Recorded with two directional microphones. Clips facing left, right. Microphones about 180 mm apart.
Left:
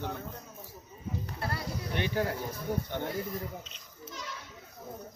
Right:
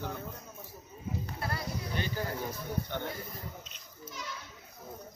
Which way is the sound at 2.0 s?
70° left (ahead or behind).